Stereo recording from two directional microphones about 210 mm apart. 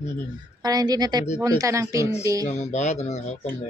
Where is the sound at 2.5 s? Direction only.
35° left (ahead or behind).